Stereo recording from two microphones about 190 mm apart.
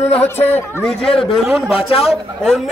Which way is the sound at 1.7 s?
30° left (ahead or behind).